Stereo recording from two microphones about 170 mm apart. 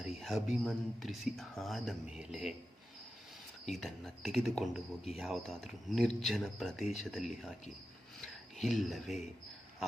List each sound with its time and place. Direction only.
0.0 s a sound: centre (ahead or behind)
0.5 s speech: centre (ahead or behind)
3.7 s speech: centre (ahead or behind)
8.5 s speech: centre (ahead or behind)